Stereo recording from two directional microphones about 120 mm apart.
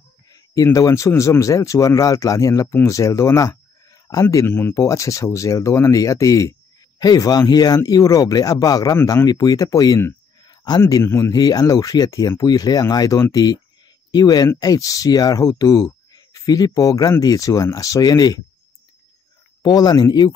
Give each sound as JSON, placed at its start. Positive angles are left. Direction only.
{"t": 0.7, "sound": "speech", "side_deg": 25}
{"t": 10.4, "sound": "a sound", "side_deg": 35}
{"t": 10.8, "sound": "speech", "side_deg": 25}
{"t": 19.6, "sound": "speech", "side_deg": 35}